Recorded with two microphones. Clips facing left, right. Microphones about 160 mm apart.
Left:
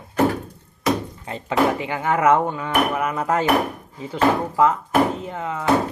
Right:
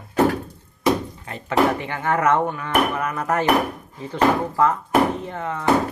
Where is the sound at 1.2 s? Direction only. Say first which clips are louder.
Even; 20° left (ahead or behind).